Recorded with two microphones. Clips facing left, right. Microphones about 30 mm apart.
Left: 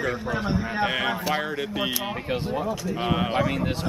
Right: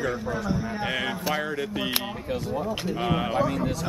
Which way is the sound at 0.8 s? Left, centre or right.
Left.